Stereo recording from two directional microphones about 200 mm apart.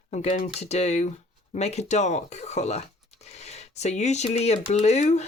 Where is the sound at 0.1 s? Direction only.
35° left (ahead or behind).